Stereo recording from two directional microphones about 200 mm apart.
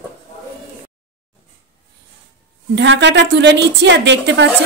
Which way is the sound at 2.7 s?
65° right (ahead or behind).